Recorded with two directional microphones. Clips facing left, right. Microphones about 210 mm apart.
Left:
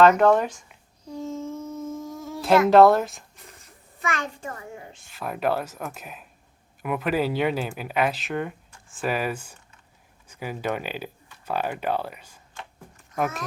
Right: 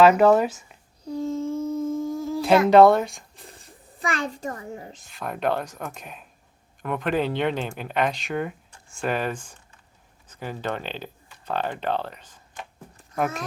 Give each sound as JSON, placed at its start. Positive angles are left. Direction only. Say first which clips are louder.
{"t": 0.0, "sound": "speech", "louder": "right 1 dB", "side_deg": -5}
{"t": 1.1, "sound": "humming", "louder": "right 5 dB", "side_deg": -35}
{"t": 2.6, "sound": "speech", "louder": "right 1 dB", "side_deg": 0}
{"t": 3.3, "sound": "a child's voice", "louder": "right 3 dB", "side_deg": -30}
{"t": 5.0, "sound": "speech", "louder": "even", "side_deg": 0}